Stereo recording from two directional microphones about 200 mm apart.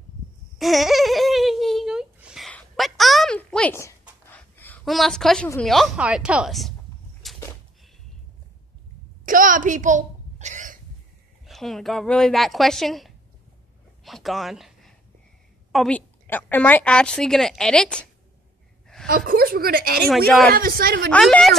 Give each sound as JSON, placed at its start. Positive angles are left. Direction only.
{"t": 0.6, "sound": "babbling", "side_deg": 0}
{"t": 5.6, "sound": "a woman's voice", "side_deg": 0}
{"t": 7.2, "sound": "a sound", "side_deg": 0}
{"t": 9.2, "sound": "a sound", "side_deg": -40}
{"t": 11.4, "sound": "a woman's voice", "side_deg": 0}
{"t": 14.0, "sound": "a sound", "side_deg": 0}
{"t": 15.7, "sound": "a woman's voice", "side_deg": 5}
{"t": 19.0, "sound": "a woman's voice", "side_deg": -45}
{"t": 21.1, "sound": "a woman's voice", "side_deg": 5}